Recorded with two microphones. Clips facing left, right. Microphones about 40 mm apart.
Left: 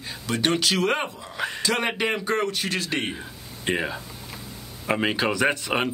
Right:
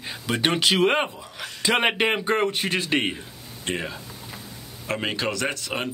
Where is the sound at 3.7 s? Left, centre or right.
Centre.